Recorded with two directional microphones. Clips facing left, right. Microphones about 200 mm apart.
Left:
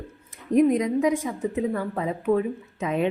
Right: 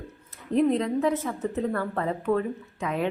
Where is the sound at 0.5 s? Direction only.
15° left (ahead or behind).